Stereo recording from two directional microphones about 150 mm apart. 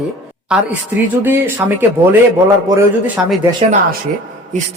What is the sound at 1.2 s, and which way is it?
Speech, 15° right (ahead or behind).